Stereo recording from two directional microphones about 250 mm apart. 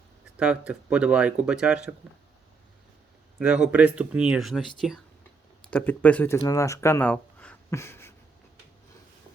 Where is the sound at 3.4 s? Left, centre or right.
Centre.